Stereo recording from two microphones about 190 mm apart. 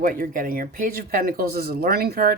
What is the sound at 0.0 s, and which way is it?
Speech, 50° right (ahead or behind).